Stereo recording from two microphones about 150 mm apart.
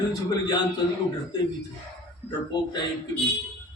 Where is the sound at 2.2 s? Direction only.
30° left (ahead or behind).